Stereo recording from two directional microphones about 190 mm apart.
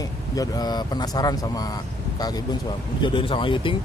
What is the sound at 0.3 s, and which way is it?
Speech, 20° left (ahead or behind).